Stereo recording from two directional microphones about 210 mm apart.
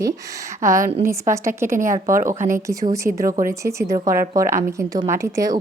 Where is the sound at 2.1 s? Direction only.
40° right (ahead or behind).